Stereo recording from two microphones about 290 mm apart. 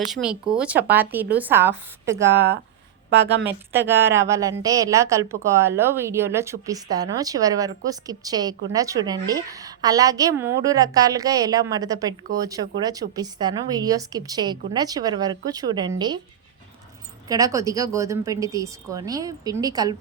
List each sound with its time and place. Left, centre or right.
0.1 s a woman's voice: centre
3.1 s speech: right
3.4 s a woman's voice: centre
17.2 s a woman's voice: centre